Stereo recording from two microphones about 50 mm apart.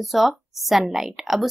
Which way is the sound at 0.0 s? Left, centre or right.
Centre.